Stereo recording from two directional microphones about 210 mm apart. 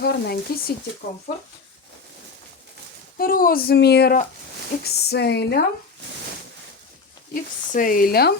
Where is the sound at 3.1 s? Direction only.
45° left (ahead or behind).